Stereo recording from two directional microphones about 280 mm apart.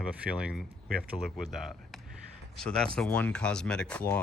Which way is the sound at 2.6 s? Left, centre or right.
Centre.